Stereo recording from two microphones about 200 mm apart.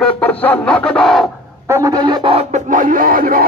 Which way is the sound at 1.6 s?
15° right (ahead or behind).